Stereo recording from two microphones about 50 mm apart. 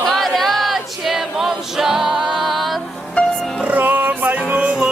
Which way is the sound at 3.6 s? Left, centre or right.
Right.